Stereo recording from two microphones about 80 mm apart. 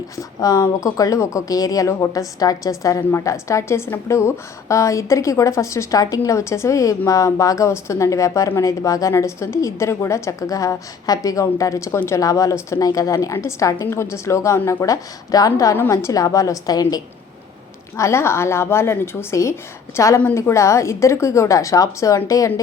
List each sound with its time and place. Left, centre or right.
0.2 s a woman's voice: left
12.2 s a woman's voice: left
17.9 s a woman's voice: left